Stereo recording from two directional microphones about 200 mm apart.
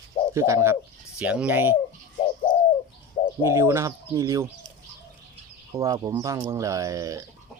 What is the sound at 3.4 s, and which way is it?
Speech, 15° right (ahead or behind).